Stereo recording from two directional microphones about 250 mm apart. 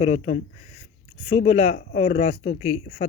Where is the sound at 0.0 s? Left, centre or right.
Left.